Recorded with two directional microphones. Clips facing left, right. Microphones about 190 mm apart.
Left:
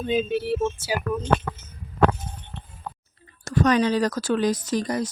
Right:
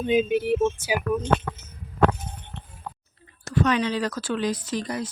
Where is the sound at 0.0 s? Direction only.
15° right (ahead or behind).